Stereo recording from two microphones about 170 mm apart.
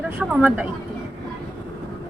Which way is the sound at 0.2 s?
5° right (ahead or behind).